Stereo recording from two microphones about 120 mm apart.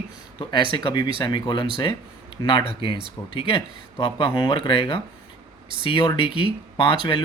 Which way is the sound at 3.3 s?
50° left (ahead or behind).